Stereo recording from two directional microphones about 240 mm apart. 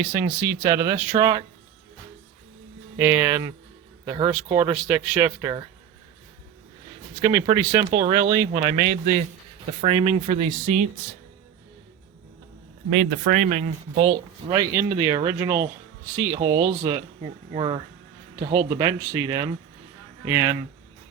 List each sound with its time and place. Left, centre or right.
0.2 s speech: centre
3.0 s speech: centre
7.2 s speech: centre
12.9 s speech: right
14.5 s a man's voice: centre